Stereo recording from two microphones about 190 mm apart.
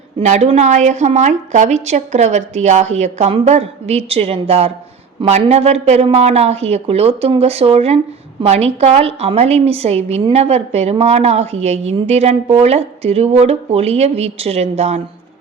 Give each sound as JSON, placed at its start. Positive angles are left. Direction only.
{"t": 0.2, "sound": "a woman's voice", "side_deg": -35}